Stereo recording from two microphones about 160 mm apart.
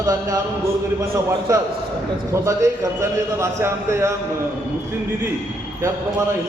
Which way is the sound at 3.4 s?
15° right (ahead or behind).